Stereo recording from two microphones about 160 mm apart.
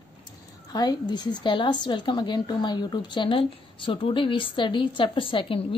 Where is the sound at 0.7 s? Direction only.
25° left (ahead or behind).